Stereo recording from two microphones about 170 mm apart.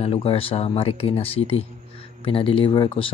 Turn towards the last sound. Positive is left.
turn(degrees=30)  # may be behind; listen again after turning